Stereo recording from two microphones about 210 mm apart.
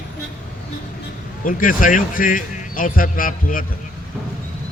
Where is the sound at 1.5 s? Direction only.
40° left (ahead or behind).